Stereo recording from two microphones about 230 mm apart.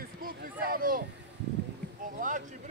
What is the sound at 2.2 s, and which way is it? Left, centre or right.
Speech, right.